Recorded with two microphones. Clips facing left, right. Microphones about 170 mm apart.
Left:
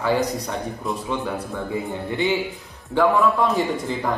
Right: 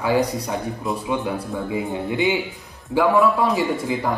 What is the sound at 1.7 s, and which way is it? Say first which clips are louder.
Speech: right 3 dB; 20° right (ahead or behind).